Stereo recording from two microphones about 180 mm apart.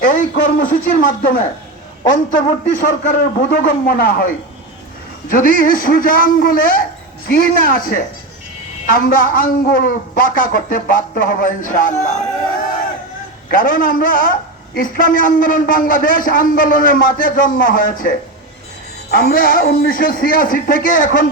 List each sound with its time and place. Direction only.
0.0 s a man's voice: 50° left (ahead or behind)
5.3 s a man's voice: 50° left (ahead or behind)
13.5 s a man's voice: 50° left (ahead or behind)